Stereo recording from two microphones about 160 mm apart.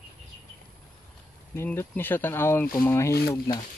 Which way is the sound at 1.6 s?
15° left (ahead or behind).